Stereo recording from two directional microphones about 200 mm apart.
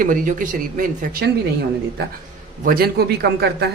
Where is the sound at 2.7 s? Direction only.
50° right (ahead or behind).